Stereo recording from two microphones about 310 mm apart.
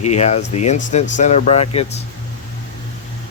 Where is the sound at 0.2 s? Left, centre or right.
Left.